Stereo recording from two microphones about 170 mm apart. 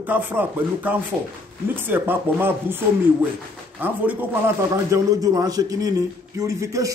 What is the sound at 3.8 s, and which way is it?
A man's voice, 10° right (ahead or behind).